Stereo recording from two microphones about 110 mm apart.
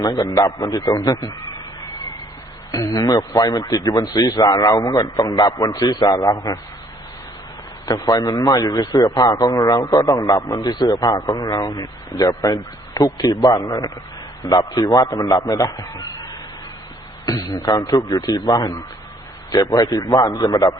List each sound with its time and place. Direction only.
0.0 s a man's voice: 35° left (ahead or behind)
2.7 s a man's voice: 35° left (ahead or behind)
7.9 s a man's voice: 30° left (ahead or behind)
17.2 s a man's voice: 35° left (ahead or behind)